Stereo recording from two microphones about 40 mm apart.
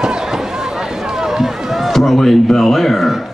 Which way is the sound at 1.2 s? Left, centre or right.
Centre.